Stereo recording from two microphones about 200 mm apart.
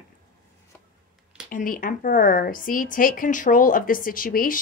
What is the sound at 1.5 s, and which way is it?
A woman's voice, 40° left (ahead or behind).